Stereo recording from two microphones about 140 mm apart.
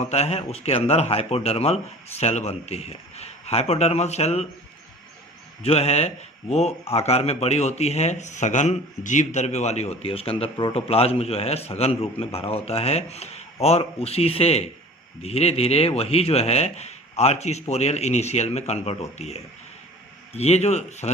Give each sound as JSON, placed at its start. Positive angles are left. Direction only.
{"t": 0.0, "sound": "a man's voice", "side_deg": 50}
{"t": 5.6, "sound": "a man's voice", "side_deg": 50}